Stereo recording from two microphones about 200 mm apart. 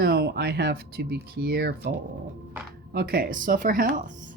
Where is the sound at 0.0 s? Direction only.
55° right (ahead or behind).